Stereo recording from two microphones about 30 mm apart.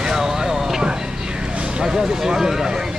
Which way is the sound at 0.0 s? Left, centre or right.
Centre.